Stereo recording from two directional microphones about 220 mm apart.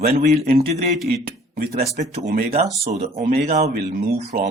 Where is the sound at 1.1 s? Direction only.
40° right (ahead or behind).